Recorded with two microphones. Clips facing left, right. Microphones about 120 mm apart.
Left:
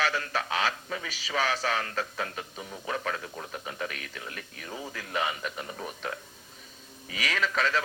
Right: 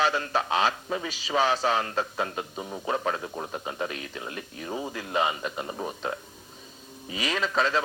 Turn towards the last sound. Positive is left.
turn(degrees=-25)  # may be behind; listen again after turning